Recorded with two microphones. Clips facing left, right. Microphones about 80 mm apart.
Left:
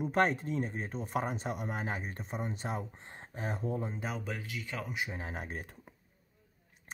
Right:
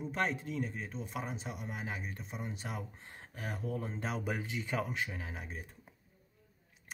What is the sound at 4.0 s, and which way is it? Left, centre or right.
Speech, centre.